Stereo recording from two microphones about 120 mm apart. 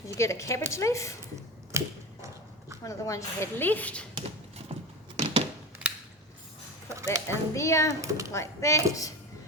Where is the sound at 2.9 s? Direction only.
25° left (ahead or behind).